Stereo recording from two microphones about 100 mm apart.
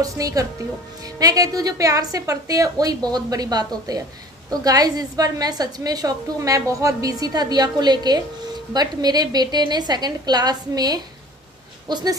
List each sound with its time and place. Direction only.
0.0 s a woman's voice: 35° right (ahead or behind)